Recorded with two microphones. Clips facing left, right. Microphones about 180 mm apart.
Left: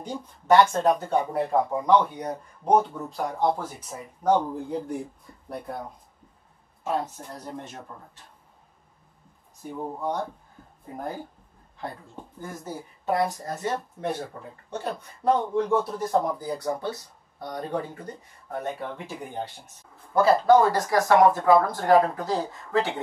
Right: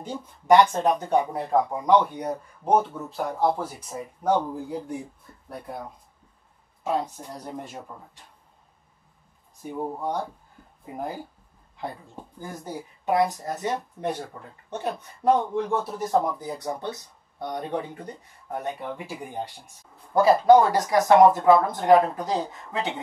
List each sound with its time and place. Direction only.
0.5 s speech: 15° right (ahead or behind)
6.8 s speech: 15° right (ahead or behind)
9.6 s speech: 10° right (ahead or behind)
12.4 s speech: centre (ahead or behind)
13.0 s speech: 15° right (ahead or behind)
15.7 s speech: 5° right (ahead or behind)
16.1 s speech: 20° right (ahead or behind)